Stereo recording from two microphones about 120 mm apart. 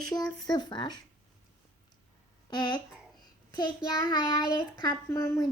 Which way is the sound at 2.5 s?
40° left (ahead or behind).